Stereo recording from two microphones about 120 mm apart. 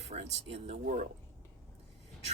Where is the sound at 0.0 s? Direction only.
60° right (ahead or behind).